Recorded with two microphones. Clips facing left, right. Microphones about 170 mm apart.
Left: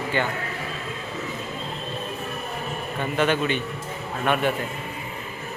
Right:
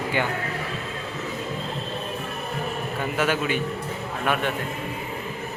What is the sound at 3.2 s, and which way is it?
Speech, 5° right (ahead or behind).